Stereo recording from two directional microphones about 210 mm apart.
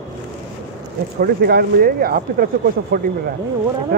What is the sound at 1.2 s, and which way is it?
Speech, 50° right (ahead or behind).